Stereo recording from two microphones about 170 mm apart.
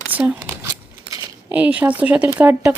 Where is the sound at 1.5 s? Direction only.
10° right (ahead or behind).